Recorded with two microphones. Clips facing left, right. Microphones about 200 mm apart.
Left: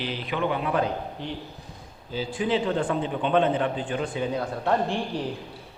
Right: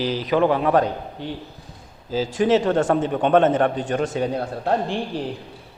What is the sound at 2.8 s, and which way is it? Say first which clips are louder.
A man's voice: right 6 dB; 50° right (ahead or behind).